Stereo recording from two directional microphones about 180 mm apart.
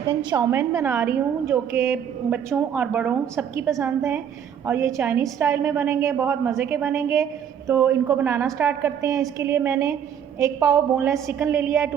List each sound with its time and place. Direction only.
0.3 s a woman's voice: 20° right (ahead or behind)